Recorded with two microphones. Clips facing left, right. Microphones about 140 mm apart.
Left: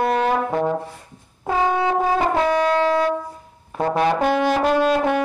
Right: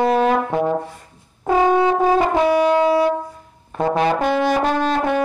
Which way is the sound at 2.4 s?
10° right (ahead or behind).